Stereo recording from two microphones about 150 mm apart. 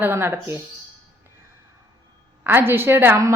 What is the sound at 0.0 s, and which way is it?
Speech, 15° right (ahead or behind).